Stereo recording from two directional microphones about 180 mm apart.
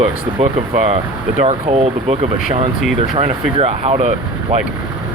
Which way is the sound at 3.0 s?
35° right (ahead or behind).